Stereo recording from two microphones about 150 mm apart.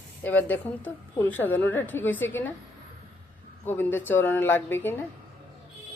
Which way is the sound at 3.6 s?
15° left (ahead or behind).